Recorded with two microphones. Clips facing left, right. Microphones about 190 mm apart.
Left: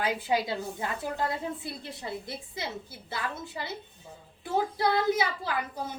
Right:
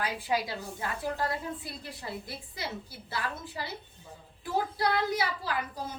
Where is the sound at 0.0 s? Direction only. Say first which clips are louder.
Left 3 dB; 25° left (ahead or behind).